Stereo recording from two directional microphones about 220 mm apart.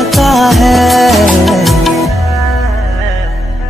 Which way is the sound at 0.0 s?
Centre (ahead or behind).